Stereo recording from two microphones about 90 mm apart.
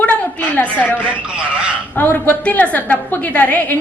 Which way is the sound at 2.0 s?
20° left (ahead or behind).